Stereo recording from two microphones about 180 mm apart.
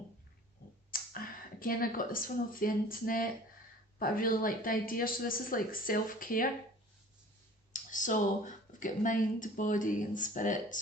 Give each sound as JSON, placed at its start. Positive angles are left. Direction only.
{"t": 0.9, "sound": "speech", "side_deg": 50}
{"t": 7.7, "sound": "speech", "side_deg": 45}